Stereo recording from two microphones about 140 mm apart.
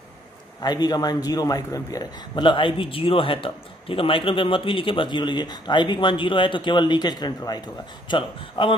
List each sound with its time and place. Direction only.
0.6 s a man's voice: 30° left (ahead or behind)